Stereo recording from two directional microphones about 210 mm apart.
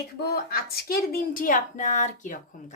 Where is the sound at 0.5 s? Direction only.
45° left (ahead or behind).